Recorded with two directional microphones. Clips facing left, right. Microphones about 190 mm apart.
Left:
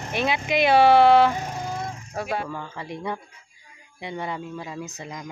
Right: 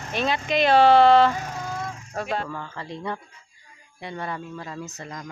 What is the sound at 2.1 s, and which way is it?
Speech, 10° left (ahead or behind).